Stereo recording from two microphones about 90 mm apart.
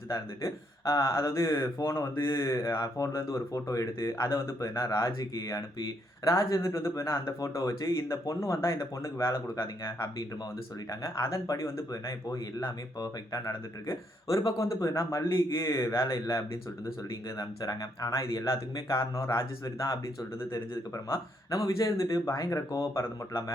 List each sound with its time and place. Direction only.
0.1 s speech: 35° left (ahead or behind)
13.5 s speech: 30° left (ahead or behind)